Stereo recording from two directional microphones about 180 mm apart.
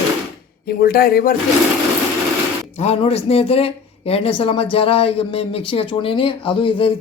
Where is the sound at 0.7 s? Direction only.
55° left (ahead or behind).